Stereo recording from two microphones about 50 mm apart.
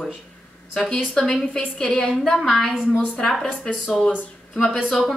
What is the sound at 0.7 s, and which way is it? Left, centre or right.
Speech, centre.